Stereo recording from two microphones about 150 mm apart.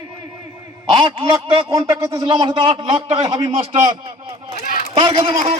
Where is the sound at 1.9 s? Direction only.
25° right (ahead or behind).